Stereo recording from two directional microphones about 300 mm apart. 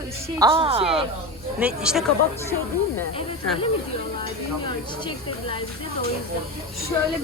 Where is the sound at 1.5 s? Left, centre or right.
Centre.